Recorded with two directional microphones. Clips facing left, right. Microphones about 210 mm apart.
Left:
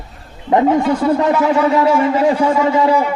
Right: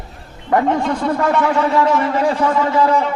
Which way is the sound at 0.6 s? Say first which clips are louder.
Left 4 dB; 5° left (ahead or behind).